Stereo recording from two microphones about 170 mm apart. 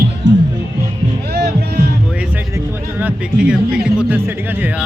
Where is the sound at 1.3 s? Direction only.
75° right (ahead or behind).